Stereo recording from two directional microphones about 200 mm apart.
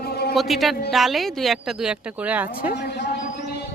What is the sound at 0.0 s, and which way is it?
Music, 50° left (ahead or behind).